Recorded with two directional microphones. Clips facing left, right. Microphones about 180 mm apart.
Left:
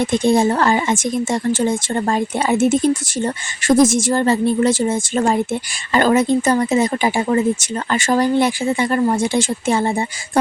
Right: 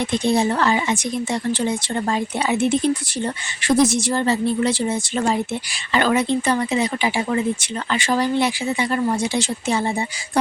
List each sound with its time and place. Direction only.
0.0 s speech: 50° left (ahead or behind)